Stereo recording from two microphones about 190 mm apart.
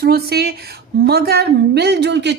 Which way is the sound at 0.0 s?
55° right (ahead or behind).